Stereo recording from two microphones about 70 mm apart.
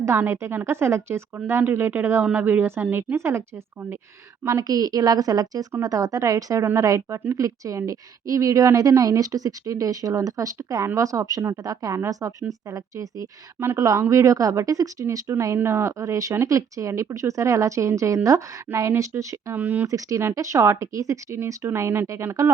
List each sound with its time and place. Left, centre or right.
0.2 s a woman's voice: right
4.6 s a woman's voice: right
15.5 s a woman's voice: right
19.5 s a woman's voice: right
19.9 s a woman's voice: right
21.3 s speech: right